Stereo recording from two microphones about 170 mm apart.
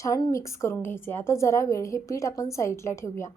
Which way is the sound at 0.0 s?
20° left (ahead or behind).